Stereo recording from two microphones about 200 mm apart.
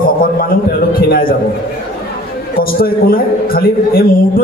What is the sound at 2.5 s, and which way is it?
A man's voice, 45° left (ahead or behind).